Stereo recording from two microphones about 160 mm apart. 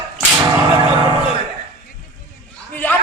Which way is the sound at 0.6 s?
20° right (ahead or behind).